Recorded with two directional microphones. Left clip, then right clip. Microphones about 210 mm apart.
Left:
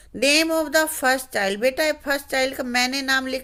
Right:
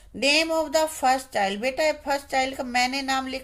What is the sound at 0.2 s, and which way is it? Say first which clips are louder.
A woman's voice: left 3 dB; 40° left (ahead or behind).